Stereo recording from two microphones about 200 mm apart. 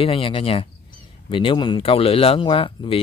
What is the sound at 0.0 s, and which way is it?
Speech, 25° left (ahead or behind).